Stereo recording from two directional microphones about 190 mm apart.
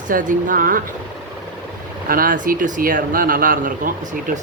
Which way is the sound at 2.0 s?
50° right (ahead or behind).